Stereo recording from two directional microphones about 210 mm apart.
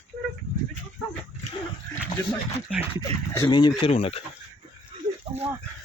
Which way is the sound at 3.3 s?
20° left (ahead or behind).